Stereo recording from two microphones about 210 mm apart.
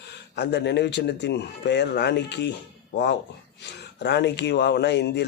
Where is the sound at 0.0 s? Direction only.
55° left (ahead or behind).